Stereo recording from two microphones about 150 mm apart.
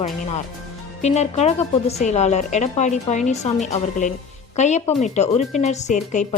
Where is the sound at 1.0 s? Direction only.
50° left (ahead or behind).